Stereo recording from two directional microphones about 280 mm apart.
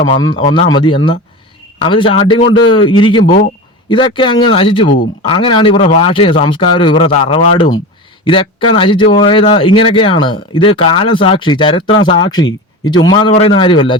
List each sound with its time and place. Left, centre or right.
0.1 s speech: centre